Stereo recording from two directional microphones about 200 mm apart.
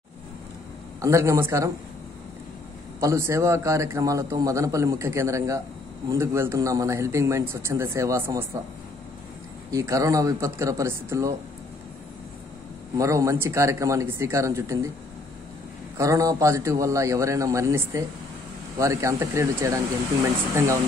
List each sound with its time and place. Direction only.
1.0 s a man's voice: 15° right (ahead or behind)
3.0 s a man's voice: 15° right (ahead or behind)
9.7 s a man's voice: 15° right (ahead or behind)
12.9 s a man's voice: 15° right (ahead or behind)
16.0 s a man's voice: 15° right (ahead or behind)